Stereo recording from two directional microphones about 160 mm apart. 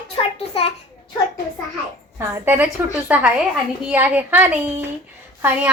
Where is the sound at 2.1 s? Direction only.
15° right (ahead or behind).